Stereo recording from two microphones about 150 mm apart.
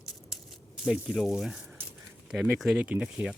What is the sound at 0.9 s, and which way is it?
Speech, 5° right (ahead or behind).